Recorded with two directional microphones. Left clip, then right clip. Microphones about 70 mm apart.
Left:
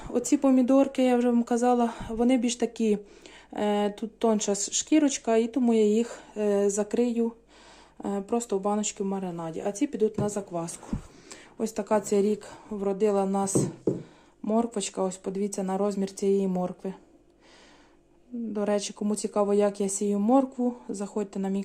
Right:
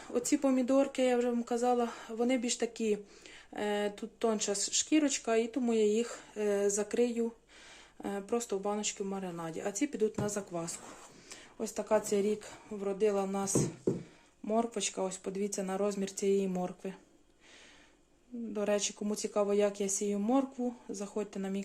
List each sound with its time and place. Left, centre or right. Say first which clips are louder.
0.0 s speech: left 6 dB; left
0.9 s speech: left 6 dB; left
9.4 s speech: left 5 dB; left
11.3 s a sound: left 7 dB; left
11.8 s speech: left 5 dB; left
12.8 s speech: left 6 dB; left; by 17.0 s centre
18.5 s speech: left 4 dB; left
20.1 s speech: left 9 dB; left